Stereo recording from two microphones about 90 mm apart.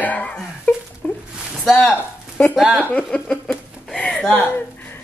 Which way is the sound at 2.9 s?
15° left (ahead or behind).